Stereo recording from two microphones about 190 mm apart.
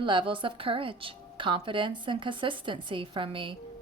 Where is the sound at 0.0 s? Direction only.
25° right (ahead or behind).